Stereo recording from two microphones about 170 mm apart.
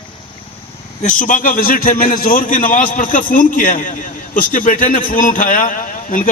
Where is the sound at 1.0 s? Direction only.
50° left (ahead or behind).